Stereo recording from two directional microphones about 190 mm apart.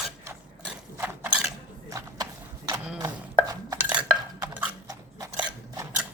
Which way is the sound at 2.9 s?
20° right (ahead or behind).